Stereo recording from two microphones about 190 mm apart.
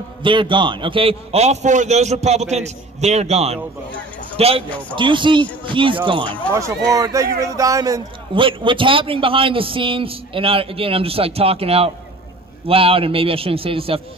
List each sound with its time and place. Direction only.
0.2 s a man's voice: 25° right (ahead or behind)